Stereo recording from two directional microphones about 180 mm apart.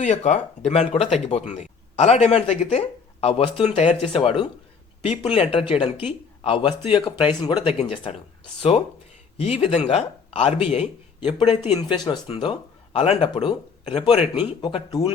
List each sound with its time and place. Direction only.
0.0 s speech: 40° left (ahead or behind)
9.4 s speech: 35° left (ahead or behind)
12.3 s speech: 35° left (ahead or behind)